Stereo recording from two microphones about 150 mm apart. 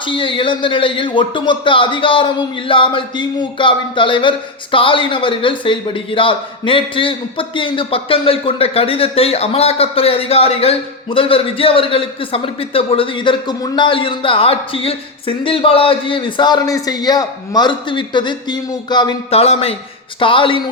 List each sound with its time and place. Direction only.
0.0 s speech: 35° left (ahead or behind)
19.3 s speech: 40° left (ahead or behind)